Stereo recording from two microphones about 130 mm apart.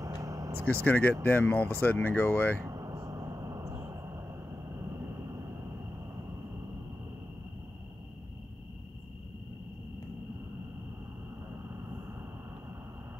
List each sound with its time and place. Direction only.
0.0 s vehicle: 25° right (ahead or behind)
0.8 s speech: 15° left (ahead or behind)
2.6 s a sound: 25° right (ahead or behind)
4.7 s vehicle: 20° right (ahead or behind)